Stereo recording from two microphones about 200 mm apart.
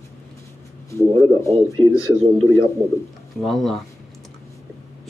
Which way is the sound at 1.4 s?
15° left (ahead or behind).